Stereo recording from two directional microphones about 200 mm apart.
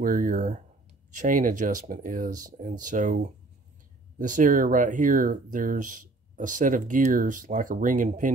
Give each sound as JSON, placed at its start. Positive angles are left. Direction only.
{"t": 0.0, "sound": "speech", "side_deg": -45}